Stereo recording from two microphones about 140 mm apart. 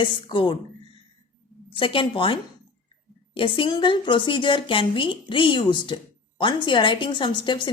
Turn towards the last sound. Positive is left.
turn(degrees=35)  # may be behind; listen again after turning